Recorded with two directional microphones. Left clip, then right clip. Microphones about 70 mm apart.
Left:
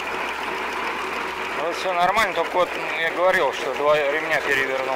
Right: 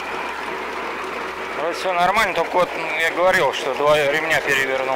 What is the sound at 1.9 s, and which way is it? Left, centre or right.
Speech, right.